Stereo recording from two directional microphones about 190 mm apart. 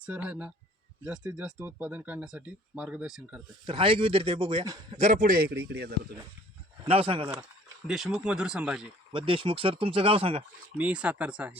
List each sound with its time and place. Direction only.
0.0 s speech: 5° right (ahead or behind)
3.7 s speech: 30° right (ahead or behind)
4.9 s a man's voice: 40° right (ahead or behind); by 5.9 s 60° right (ahead or behind)
6.8 s speech: 30° right (ahead or behind)
7.9 s speech: centre (ahead or behind)
9.1 s speech: 25° right (ahead or behind)
10.8 s speech: 5° right (ahead or behind)